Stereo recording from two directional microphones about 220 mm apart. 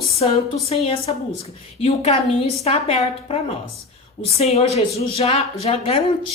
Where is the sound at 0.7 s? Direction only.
25° left (ahead or behind).